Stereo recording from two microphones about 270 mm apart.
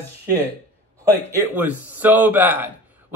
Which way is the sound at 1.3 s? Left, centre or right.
Centre.